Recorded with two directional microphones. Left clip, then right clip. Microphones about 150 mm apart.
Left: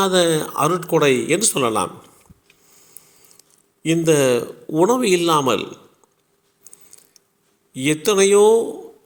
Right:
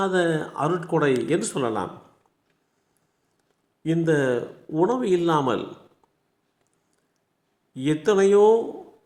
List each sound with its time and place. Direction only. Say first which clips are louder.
0.0 s speech: left 6 dB; 15° left (ahead or behind)
3.8 s speech: left 6 dB; 20° left (ahead or behind)
7.7 s speech: left 3 dB; 20° left (ahead or behind)